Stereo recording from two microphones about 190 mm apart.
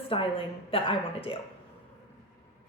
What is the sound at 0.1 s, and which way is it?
A woman's voice, 30° left (ahead or behind).